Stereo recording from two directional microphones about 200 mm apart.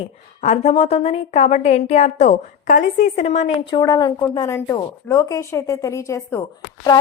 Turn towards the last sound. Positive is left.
turn(degrees=15)  # may be behind; listen again after turning